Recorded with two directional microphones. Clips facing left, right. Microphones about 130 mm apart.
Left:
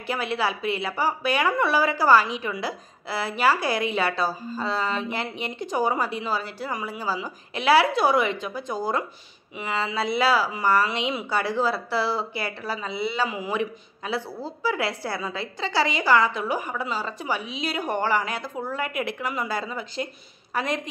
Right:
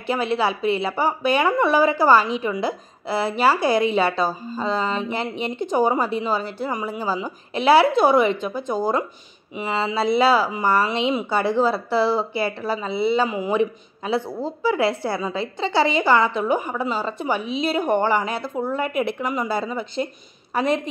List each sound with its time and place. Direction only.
0.0 s a woman's voice: 25° right (ahead or behind)